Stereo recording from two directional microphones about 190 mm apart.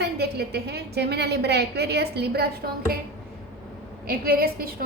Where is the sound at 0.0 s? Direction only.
60° right (ahead or behind).